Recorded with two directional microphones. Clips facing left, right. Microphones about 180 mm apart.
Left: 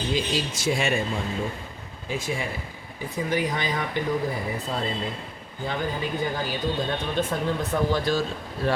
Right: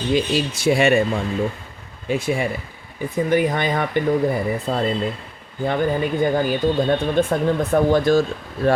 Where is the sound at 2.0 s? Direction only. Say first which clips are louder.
Right 8 dB; 65° right (ahead or behind).